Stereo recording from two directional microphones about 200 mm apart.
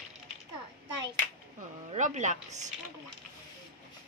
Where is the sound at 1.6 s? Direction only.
40° right (ahead or behind).